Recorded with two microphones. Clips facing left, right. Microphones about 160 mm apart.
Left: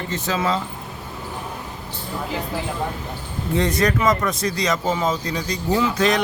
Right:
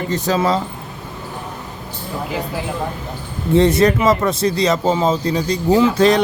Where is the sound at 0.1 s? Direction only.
35° right (ahead or behind).